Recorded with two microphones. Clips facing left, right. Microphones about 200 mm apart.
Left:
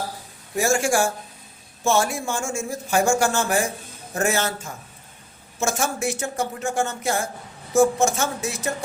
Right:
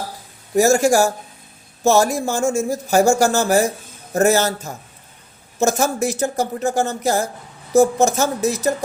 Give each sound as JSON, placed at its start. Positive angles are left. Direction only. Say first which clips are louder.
{"t": 0.5, "sound": "speech", "louder": "right 7 dB", "side_deg": -40}